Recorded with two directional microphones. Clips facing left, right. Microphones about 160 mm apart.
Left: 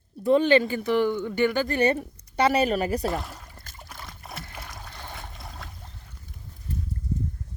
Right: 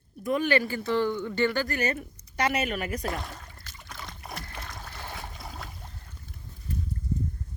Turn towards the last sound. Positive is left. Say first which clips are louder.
# right 1 dB
turn(degrees=0)  # may be behind; listen again after turning